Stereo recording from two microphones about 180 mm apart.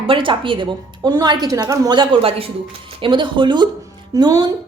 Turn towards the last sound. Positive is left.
turn(degrees=-20)  # may be behind; listen again after turning